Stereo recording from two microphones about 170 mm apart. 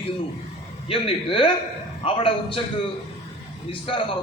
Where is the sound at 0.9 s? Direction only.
30° left (ahead or behind).